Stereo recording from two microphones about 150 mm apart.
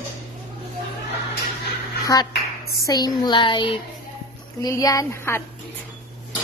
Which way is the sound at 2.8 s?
25° left (ahead or behind).